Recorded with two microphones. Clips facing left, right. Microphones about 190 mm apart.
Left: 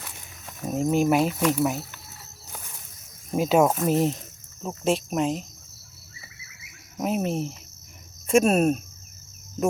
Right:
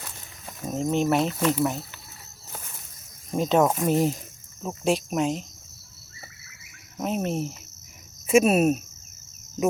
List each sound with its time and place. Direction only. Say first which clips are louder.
0.6 s speech: left 2 dB; 5° left (ahead or behind)
3.3 s speech: left 1 dB; 5° left (ahead or behind)
6.9 s speech: left 1 dB; 5° left (ahead or behind)